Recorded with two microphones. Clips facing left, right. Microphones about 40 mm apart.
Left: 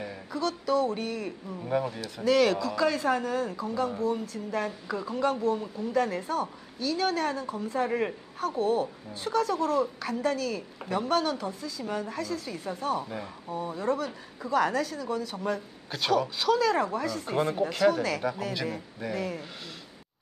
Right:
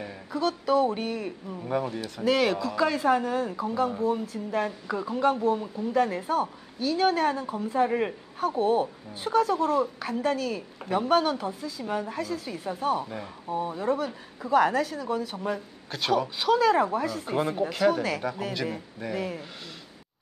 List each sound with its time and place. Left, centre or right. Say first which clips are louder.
0.0 s speech: right 3 dB; centre